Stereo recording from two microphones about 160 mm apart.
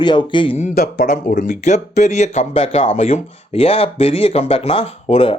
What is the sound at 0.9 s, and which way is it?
Speech, 55° left (ahead or behind).